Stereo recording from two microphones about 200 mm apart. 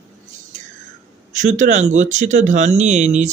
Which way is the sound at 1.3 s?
40° right (ahead or behind).